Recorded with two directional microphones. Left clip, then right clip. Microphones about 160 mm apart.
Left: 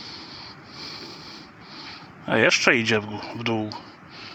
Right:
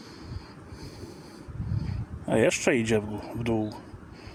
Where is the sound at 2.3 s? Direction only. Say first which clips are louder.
Left 5 dB; 20° right (ahead or behind).